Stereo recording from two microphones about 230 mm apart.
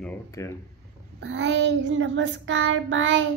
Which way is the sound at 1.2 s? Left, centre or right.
Right.